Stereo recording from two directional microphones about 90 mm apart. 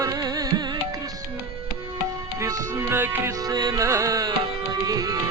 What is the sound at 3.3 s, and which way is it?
Music, 45° right (ahead or behind).